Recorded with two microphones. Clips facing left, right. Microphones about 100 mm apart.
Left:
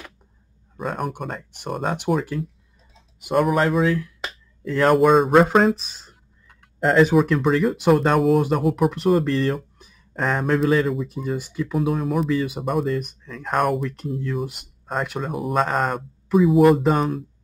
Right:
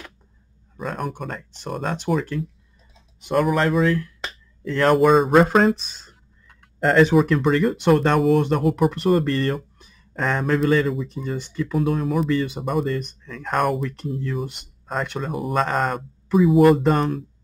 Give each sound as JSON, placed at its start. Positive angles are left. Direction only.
{"t": 0.7, "sound": "speech", "side_deg": 0}